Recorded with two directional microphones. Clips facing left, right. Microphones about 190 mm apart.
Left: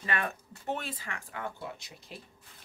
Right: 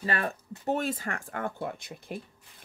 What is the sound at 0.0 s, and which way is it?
Speech, 35° right (ahead or behind).